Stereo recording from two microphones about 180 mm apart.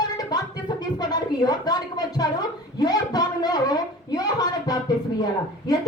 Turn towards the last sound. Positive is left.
turn(degrees=20)  # may be behind; listen again after turning